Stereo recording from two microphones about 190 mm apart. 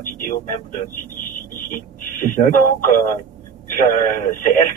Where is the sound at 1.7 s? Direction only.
45° left (ahead or behind).